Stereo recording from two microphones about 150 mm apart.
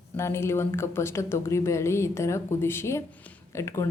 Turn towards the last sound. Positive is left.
turn(degrees=20)  # may be behind; listen again after turning